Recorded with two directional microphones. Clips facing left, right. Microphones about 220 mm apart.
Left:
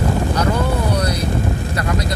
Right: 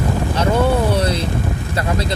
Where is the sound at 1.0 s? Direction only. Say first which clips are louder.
Right 2 dB; 25° right (ahead or behind).